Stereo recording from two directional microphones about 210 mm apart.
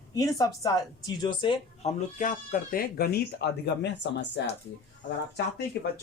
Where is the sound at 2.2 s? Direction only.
40° left (ahead or behind); by 4.5 s 55° left (ahead or behind).